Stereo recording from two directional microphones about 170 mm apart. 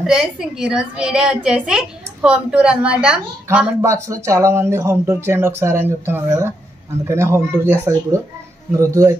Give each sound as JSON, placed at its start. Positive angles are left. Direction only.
{"t": 0.0, "sound": "a woman's voice", "side_deg": -5}
{"t": 3.4, "sound": "speech", "side_deg": -15}